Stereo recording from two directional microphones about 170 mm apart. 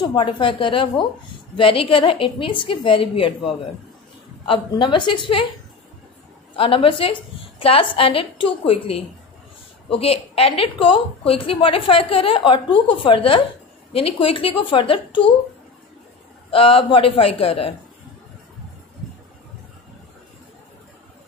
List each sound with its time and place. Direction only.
0.0 s a woman's voice: 30° left (ahead or behind)
4.5 s a woman's voice: 30° left (ahead or behind)
6.5 s a woman's voice: 30° left (ahead or behind)
16.4 s a woman's voice: 30° left (ahead or behind)